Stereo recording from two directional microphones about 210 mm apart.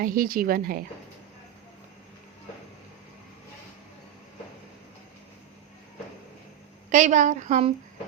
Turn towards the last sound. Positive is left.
turn(degrees=-35)  # may be behind; listen again after turning